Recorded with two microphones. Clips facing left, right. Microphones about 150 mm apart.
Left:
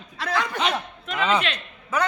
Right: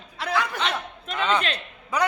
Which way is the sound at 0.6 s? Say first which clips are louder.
Left 3 dB; centre (ahead or behind).